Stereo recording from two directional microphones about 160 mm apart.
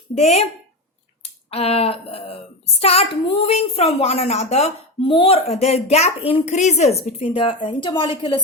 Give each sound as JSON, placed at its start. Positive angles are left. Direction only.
{"t": 0.1, "sound": "a child's voice", "side_deg": 40}